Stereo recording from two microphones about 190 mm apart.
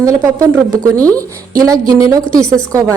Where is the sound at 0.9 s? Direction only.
5° left (ahead or behind).